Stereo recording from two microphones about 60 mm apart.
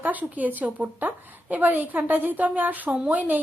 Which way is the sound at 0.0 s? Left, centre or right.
Right.